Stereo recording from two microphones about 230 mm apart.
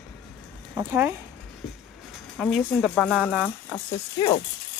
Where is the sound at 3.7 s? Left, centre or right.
Centre.